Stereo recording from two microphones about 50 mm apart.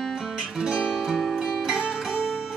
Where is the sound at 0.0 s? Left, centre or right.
Centre.